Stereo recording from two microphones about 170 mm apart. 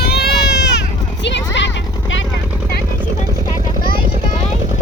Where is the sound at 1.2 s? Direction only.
90° left.